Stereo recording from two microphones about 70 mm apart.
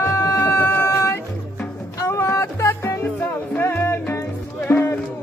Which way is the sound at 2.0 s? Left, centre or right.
Left.